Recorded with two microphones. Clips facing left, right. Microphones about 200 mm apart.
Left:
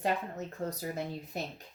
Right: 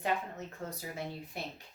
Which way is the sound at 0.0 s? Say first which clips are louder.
Left 2 dB; 40° left (ahead or behind).